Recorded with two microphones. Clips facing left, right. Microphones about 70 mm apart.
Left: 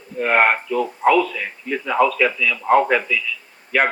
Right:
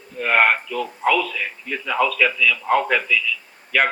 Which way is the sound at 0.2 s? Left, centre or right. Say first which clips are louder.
Left 1 dB; left.